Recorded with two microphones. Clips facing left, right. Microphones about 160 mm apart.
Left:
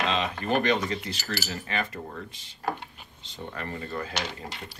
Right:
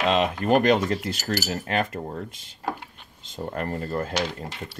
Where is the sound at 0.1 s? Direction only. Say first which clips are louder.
Right 6 dB; 45° right (ahead or behind).